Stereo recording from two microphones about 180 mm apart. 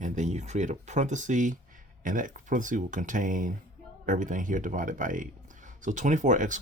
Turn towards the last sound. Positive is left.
turn(degrees=-45)  # may be behind; listen again after turning